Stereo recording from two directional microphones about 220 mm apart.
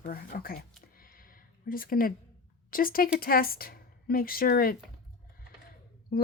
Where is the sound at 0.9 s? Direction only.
40° left (ahead or behind).